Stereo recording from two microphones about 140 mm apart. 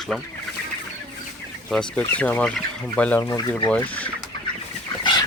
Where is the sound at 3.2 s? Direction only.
20° left (ahead or behind).